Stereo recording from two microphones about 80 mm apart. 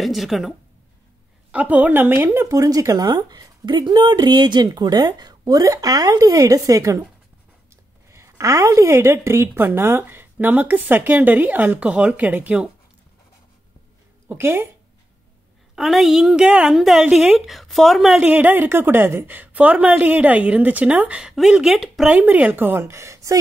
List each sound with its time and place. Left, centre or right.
0.0 s a woman's voice: centre
1.5 s a woman's voice: centre
2.4 s a woman's voice: right; by 12.6 s centre
14.3 s a woman's voice: right
15.7 s a woman's voice: centre
18.3 s a woman's voice: right
21.3 s a woman's voice: centre
22.1 s a woman's voice: centre; by 23.4 s right